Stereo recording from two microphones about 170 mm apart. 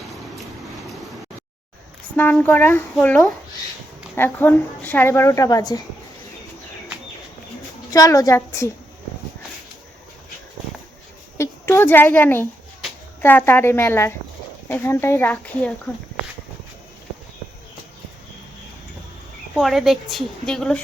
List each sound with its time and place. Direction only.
2.1 s a woman's voice: 10° left (ahead or behind)
4.1 s a woman's voice: 10° left (ahead or behind)
7.9 s a woman's voice: 20° left (ahead or behind)
11.3 s a sound: 15° left (ahead or behind)
13.2 s a woman's voice: 10° left (ahead or behind)
19.5 s a woman's voice: centre (ahead or behind)